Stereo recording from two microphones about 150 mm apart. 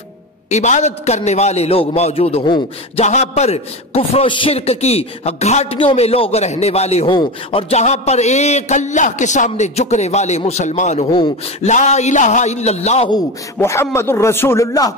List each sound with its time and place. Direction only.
0.5 s a man's voice: 50° left (ahead or behind)
3.1 s a man's voice: 50° left (ahead or behind)
7.7 s a man's voice: 45° left (ahead or behind)
13.6 s a man's voice: 15° left (ahead or behind)